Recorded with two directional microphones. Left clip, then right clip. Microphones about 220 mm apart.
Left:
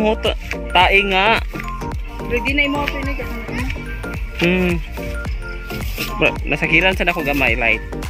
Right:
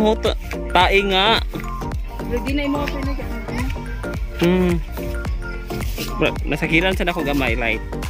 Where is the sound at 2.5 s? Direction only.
35° left (ahead or behind).